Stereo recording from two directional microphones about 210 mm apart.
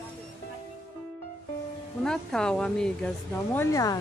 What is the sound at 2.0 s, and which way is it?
A woman's voice, 5° left (ahead or behind).